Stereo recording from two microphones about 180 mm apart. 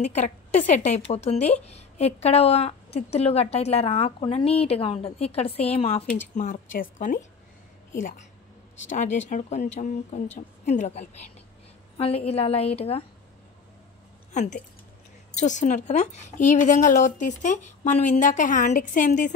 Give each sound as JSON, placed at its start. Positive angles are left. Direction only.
{"t": 0.0, "sound": "a woman's voice", "side_deg": 40}
{"t": 6.3, "sound": "a woman's voice", "side_deg": 45}
{"t": 14.3, "sound": "speech", "side_deg": 40}